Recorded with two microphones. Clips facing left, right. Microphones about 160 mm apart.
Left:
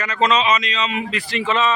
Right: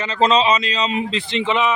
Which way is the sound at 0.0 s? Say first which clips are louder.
Right 2 dB; 30° right (ahead or behind).